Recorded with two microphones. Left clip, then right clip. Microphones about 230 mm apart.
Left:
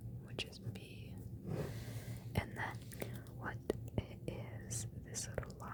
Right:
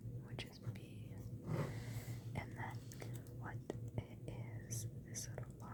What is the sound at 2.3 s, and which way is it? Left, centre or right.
Whispering, centre.